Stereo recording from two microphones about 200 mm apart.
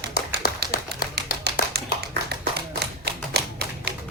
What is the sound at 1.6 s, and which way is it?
Tap, 50° left (ahead or behind).